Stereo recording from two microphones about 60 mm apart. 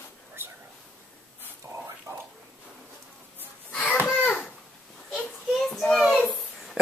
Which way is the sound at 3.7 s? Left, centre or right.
Left.